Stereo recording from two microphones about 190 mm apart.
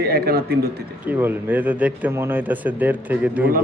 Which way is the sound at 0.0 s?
55° right (ahead or behind).